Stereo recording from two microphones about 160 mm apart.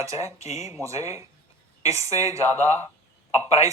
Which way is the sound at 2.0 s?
40° left (ahead or behind).